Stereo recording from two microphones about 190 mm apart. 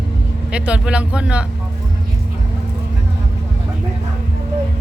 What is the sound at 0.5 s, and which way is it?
Speech, 5° right (ahead or behind).